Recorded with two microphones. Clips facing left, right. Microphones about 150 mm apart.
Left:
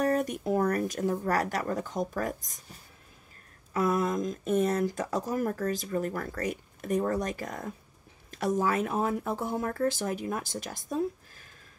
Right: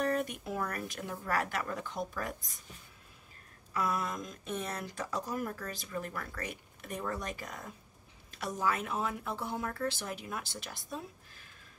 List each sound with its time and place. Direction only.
0.0 s speech: 40° left (ahead or behind)